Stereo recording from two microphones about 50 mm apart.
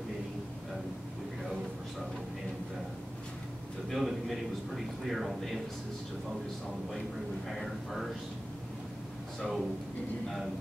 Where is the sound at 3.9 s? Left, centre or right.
Centre.